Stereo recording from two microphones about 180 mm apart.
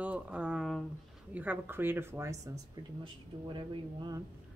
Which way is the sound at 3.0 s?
25° right (ahead or behind).